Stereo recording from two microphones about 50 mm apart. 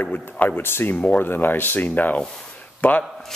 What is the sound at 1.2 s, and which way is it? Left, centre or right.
Speech, left.